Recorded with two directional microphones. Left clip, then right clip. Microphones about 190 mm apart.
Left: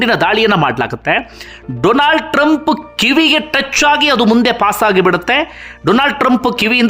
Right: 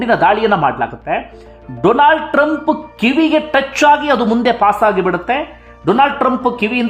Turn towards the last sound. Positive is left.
turn(degrees=20)  # may be behind; listen again after turning